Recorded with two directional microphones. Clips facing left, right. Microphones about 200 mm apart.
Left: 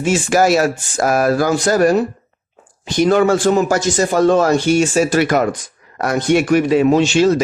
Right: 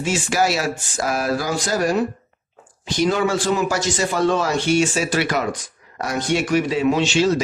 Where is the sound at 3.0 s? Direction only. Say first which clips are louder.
Left 7 dB; 55° left (ahead or behind).